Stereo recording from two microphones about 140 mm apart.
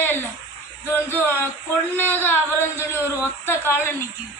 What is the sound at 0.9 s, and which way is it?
A woman's voice, 15° left (ahead or behind).